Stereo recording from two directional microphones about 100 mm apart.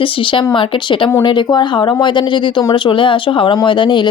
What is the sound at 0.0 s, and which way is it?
Speech, 60° left (ahead or behind).